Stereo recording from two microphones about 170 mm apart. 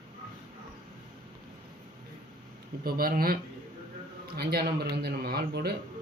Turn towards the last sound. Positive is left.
turn(degrees=-70)  # may be behind; listen again after turning